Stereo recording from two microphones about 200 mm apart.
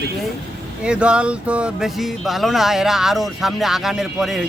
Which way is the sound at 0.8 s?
5° right (ahead or behind).